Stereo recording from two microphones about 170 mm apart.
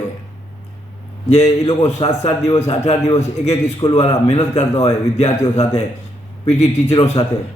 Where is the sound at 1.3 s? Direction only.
40° left (ahead or behind).